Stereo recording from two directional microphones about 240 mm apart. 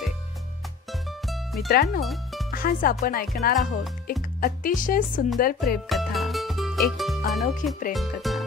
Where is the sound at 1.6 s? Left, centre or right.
Left.